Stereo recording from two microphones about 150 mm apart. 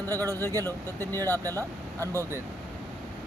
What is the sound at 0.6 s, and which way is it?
Speech, 15° left (ahead or behind).